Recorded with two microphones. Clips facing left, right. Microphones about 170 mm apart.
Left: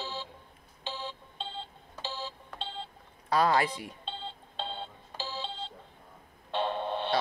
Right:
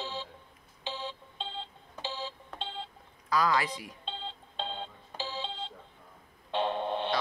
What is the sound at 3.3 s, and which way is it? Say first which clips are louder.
Speech: left 2 dB; 30° left (ahead or behind).